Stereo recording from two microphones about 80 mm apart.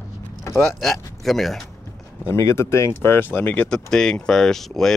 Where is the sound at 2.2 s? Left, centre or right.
Left.